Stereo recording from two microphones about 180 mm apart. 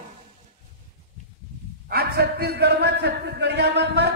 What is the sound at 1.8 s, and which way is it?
A man's voice, 60° right (ahead or behind).